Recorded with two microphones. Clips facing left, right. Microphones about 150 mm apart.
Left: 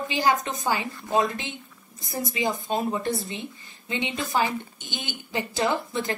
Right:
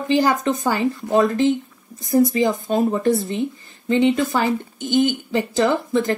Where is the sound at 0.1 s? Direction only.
45° right (ahead or behind).